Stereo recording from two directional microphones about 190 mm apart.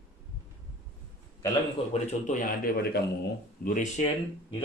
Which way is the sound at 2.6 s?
55° left (ahead or behind).